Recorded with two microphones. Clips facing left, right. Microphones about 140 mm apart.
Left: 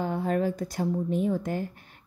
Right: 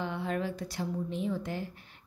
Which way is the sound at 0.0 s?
45° left (ahead or behind).